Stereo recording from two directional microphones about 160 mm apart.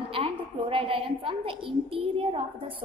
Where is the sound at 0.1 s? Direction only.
35° right (ahead or behind).